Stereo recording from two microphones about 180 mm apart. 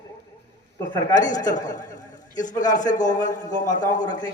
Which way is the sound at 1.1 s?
45° left (ahead or behind).